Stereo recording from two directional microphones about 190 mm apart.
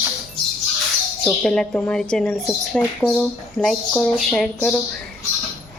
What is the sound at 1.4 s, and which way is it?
Speech, 5° left (ahead or behind).